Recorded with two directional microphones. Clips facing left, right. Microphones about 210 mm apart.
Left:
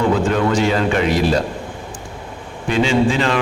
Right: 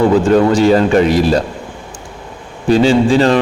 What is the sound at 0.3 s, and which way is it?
A man's voice, 35° right (ahead or behind).